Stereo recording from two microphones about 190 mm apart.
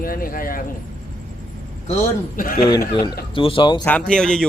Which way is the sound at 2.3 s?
45° left (ahead or behind).